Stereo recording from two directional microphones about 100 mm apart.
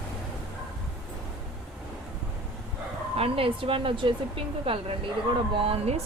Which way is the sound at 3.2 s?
70° right (ahead or behind).